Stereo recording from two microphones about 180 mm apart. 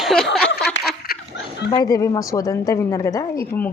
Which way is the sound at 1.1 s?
55° left (ahead or behind).